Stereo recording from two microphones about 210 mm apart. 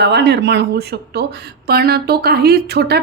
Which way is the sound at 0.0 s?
55° right (ahead or behind).